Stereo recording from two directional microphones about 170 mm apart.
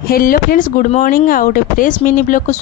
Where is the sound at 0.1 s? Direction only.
60° left (ahead or behind).